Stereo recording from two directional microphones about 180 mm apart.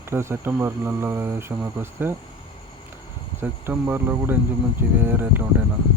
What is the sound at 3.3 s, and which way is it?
Speech, 10° right (ahead or behind).